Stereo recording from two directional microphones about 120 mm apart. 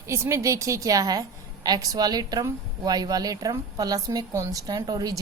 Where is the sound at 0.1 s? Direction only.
25° right (ahead or behind).